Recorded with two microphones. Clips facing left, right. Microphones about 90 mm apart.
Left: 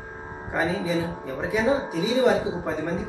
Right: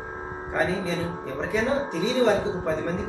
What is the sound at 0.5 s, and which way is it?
Speech, 5° left (ahead or behind).